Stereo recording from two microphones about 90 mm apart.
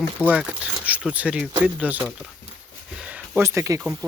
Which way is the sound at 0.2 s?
15° right (ahead or behind).